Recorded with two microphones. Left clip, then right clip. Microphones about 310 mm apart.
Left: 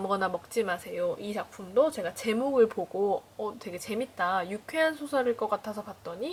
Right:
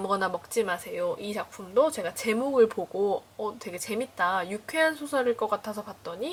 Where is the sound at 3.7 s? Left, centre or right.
Centre.